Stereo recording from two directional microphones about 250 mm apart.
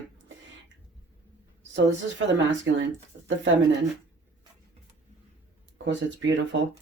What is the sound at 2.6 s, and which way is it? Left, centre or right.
Speech, right.